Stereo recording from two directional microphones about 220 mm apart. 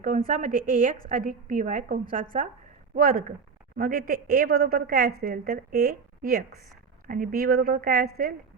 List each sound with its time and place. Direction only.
0.0 s a woman's voice: 35° right (ahead or behind)